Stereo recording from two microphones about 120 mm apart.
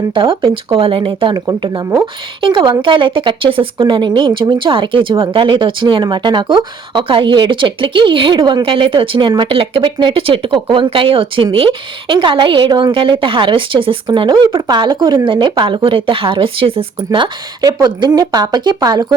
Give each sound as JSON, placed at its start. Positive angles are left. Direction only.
{"t": 0.1, "sound": "a woman's voice", "side_deg": -45}